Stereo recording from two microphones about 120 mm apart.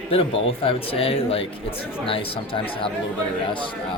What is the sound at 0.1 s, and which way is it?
Speech, 50° left (ahead or behind).